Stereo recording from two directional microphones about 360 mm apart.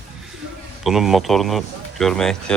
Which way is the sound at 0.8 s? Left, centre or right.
Centre.